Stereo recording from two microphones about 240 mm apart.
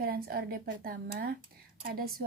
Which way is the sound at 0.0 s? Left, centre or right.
Right.